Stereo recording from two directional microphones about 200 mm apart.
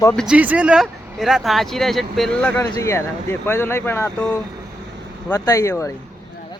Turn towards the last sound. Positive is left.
turn(degrees=15)  # may be behind; listen again after turning